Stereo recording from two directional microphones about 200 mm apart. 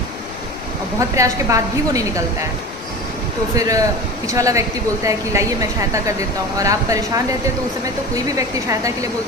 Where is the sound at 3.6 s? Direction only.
15° right (ahead or behind).